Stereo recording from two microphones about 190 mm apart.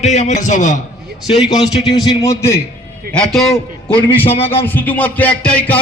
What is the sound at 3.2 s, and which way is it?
Speech, centre (ahead or behind).